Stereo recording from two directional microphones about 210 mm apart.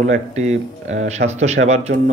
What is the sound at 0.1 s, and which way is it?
A man's voice, 35° right (ahead or behind).